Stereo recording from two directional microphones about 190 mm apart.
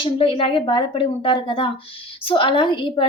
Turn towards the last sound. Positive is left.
turn(degrees=25)  # may be behind; listen again after turning